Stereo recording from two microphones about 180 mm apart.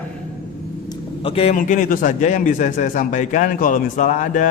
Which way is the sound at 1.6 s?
45° left (ahead or behind).